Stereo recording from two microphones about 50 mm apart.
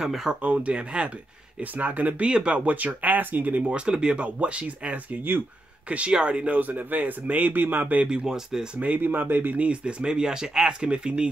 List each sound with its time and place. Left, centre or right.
0.0 s speech: centre
0.4 s speech: right
3.8 s speech: centre
6.7 s speech: right
8.0 s speech: right
8.3 s speech: centre
8.7 s speech: right
9.7 s speech: right